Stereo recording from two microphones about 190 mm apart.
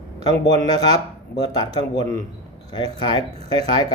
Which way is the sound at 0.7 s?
20° left (ahead or behind).